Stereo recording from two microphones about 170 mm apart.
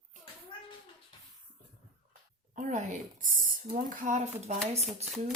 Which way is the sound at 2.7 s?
45° right (ahead or behind).